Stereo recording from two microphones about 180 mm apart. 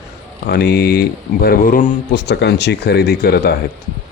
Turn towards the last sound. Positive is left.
turn(degrees=60)  # may be behind; listen again after turning